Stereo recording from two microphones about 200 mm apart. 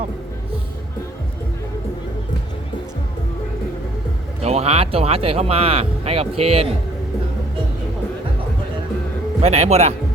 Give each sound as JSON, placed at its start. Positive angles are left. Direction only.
{"t": 4.4, "sound": "speech", "side_deg": -30}
{"t": 9.4, "sound": "a man's voice", "side_deg": -30}